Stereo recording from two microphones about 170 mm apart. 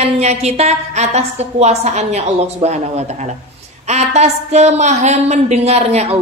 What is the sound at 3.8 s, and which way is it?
A woman's voice, 40° right (ahead or behind).